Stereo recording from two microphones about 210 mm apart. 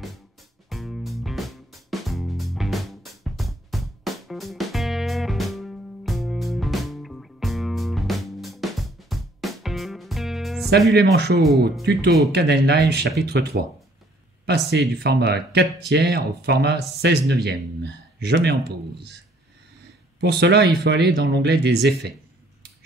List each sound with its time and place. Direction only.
0.7 s music: centre (ahead or behind)
10.9 s speech: 50° right (ahead or behind)
14.7 s speech: 50° right (ahead or behind)
20.2 s speech: 55° right (ahead or behind)